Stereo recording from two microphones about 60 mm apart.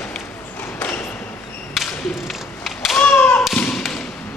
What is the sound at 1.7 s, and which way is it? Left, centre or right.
Whip, centre.